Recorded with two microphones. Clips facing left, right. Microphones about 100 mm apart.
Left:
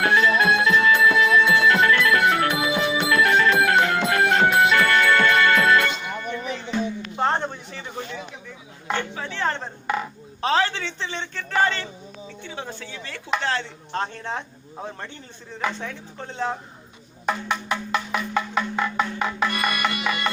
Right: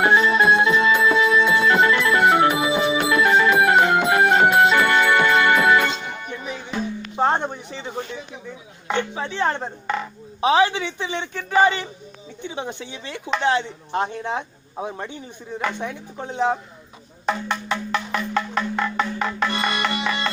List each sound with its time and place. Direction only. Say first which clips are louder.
0.0 s music: right 2 dB; 20° right (ahead or behind)
7.2 s a sound: right 3 dB; 15° right (ahead or behind)
9.8 s speech: left 1 dB; 5° left (ahead or behind)
10.4 s speech: right 4 dB; 15° right (ahead or behind)
17.2 s music: right 1 dB; 5° left (ahead or behind)
19.5 s music: right 1 dB; 25° right (ahead or behind)